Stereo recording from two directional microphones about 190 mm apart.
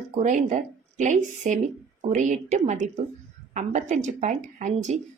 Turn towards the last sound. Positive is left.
turn(degrees=-40)  # may be behind; listen again after turning